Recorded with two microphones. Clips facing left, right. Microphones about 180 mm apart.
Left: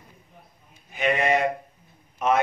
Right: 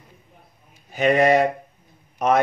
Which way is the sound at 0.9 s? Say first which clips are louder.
Right 6 dB; 40° right (ahead or behind).